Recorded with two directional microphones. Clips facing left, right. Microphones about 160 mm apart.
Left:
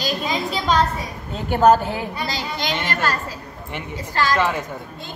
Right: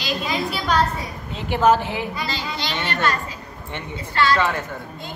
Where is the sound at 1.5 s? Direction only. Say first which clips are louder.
Left 3 dB; 40° left (ahead or behind).